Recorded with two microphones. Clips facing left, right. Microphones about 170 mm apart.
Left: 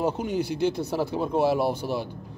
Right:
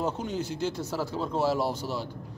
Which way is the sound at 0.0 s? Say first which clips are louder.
Left 4 dB; 10° left (ahead or behind).